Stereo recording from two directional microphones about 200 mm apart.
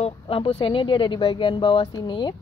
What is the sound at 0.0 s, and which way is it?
A woman's voice, 30° left (ahead or behind).